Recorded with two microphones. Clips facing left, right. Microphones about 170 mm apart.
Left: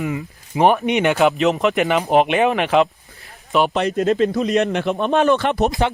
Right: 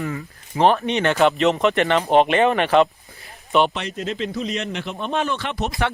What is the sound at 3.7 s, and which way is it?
Speech, 45° left (ahead or behind).